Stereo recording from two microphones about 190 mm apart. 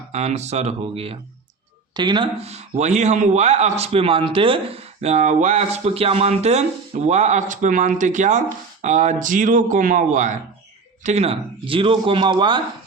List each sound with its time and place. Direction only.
0.1 s a man's voice: 35° right (ahead or behind)